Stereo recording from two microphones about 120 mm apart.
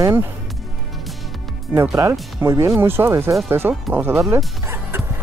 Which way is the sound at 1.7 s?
25° right (ahead or behind).